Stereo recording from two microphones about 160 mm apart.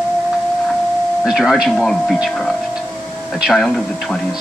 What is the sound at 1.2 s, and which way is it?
Speech, centre (ahead or behind).